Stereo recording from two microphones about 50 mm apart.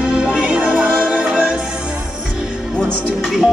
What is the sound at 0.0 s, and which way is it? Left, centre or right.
Music, centre.